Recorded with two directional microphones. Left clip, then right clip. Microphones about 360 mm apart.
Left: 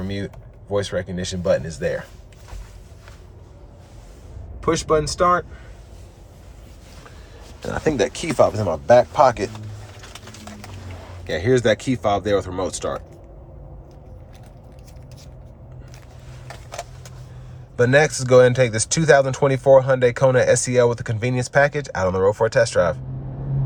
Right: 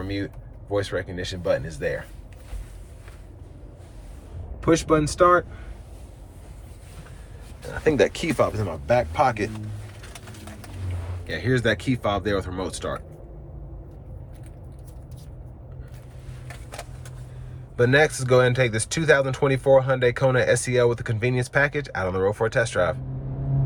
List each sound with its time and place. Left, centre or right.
0.0 s speech: centre
4.7 s speech: centre
7.9 s speech: centre
11.3 s speech: centre
17.7 s speech: centre